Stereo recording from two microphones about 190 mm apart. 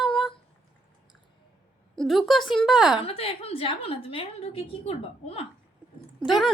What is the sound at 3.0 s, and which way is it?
A woman's voice, 30° left (ahead or behind).